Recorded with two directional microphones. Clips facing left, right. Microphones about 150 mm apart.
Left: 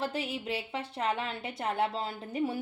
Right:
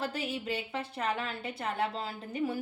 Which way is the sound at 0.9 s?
25° left (ahead or behind).